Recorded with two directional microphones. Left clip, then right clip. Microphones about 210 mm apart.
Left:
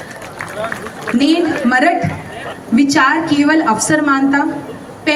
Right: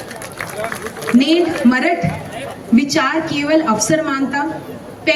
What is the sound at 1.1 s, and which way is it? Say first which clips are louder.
Speech: even; 35° left (ahead or behind).